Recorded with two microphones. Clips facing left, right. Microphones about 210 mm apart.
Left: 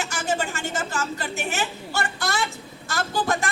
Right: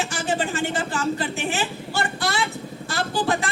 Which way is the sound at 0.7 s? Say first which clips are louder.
Right 4 dB; 40° left (ahead or behind).